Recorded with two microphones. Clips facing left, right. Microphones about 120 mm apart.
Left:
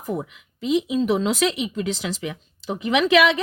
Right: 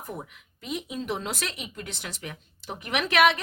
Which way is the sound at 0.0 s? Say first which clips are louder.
Left 10 dB; 90° left.